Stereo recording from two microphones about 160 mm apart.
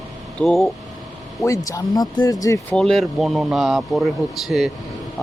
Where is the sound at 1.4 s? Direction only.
20° left (ahead or behind).